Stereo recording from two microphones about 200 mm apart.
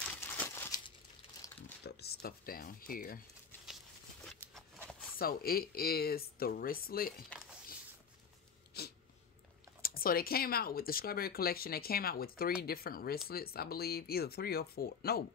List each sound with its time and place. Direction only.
0.2 s crumpling: 10° left (ahead or behind)
1.9 s speech: 55° left (ahead or behind)
4.2 s a sound: centre (ahead or behind)
5.2 s speech: 50° left (ahead or behind)
8.8 s dog: 55° left (ahead or behind)
9.8 s speech: 50° left (ahead or behind)